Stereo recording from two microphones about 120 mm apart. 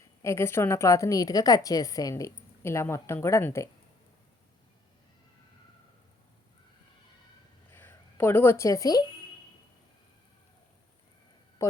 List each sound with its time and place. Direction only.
0.2 s a woman's voice: 25° left (ahead or behind)
7.7 s speech: 20° left (ahead or behind)